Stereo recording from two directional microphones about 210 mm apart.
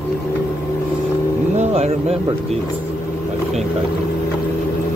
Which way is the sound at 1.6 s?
30° right (ahead or behind).